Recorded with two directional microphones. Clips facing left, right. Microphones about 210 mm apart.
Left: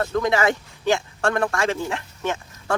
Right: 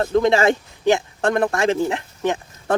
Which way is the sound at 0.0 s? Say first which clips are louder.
Right 4 dB; 25° right (ahead or behind).